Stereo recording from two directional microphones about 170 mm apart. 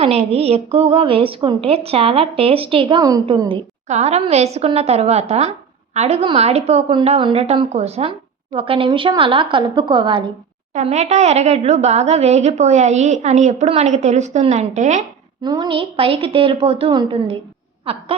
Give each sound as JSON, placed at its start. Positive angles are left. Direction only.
{"t": 0.0, "sound": "a woman's voice", "side_deg": -35}
{"t": 3.8, "sound": "a woman's voice", "side_deg": -40}
{"t": 10.8, "sound": "a woman's voice", "side_deg": -40}
{"t": 15.4, "sound": "a woman's voice", "side_deg": -25}